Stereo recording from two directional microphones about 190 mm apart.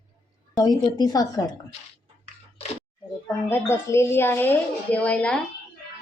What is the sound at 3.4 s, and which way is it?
A woman's voice, 10° left (ahead or behind).